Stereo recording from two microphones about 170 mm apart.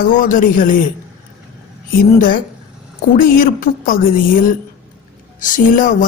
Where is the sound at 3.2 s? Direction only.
55° left (ahead or behind).